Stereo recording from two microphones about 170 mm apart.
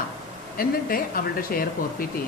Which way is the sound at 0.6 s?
60° left (ahead or behind).